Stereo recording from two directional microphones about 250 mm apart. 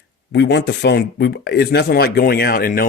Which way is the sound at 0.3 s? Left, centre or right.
Left.